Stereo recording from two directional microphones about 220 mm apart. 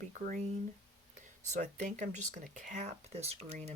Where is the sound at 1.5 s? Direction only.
35° right (ahead or behind).